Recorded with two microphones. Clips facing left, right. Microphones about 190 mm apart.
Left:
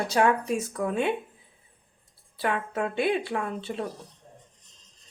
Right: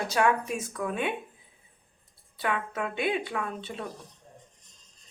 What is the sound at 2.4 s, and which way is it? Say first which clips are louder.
Speech: left 3 dB; 35° left (ahead or behind).